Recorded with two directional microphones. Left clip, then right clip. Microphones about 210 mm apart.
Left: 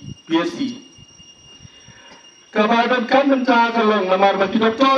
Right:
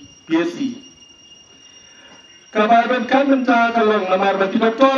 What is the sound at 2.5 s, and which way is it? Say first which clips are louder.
A man's voice: right 2 dB; 40° left (ahead or behind).